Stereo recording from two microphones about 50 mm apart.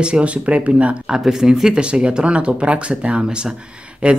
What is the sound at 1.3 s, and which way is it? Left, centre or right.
Speech, centre.